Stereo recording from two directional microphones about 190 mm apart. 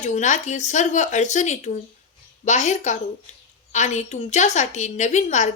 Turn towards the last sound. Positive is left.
turn(degrees=40)  # may be behind; listen again after turning